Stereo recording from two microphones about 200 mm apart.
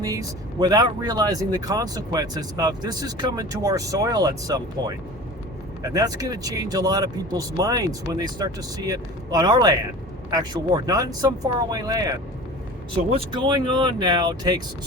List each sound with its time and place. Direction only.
0.0 s speech: 15° right (ahead or behind)